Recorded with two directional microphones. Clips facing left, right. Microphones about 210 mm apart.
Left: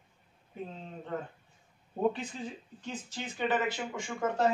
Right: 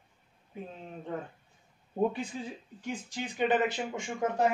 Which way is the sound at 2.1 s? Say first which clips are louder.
Left 2 dB; 10° right (ahead or behind).